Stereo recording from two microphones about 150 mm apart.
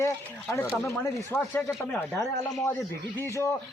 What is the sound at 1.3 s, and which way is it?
Speech, 10° left (ahead or behind).